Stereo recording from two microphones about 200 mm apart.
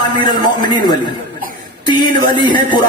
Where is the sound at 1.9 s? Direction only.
25° left (ahead or behind).